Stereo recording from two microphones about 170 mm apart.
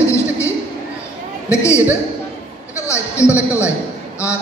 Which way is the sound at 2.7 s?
15° left (ahead or behind).